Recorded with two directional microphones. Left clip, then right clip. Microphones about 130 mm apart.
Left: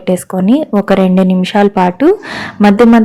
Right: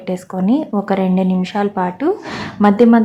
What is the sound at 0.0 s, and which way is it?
A woman's voice, 40° left (ahead or behind).